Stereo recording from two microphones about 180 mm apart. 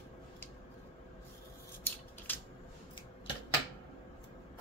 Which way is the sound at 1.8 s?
10° left (ahead or behind).